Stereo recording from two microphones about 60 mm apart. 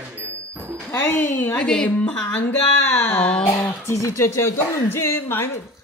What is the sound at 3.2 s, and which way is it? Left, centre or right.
Speech, centre.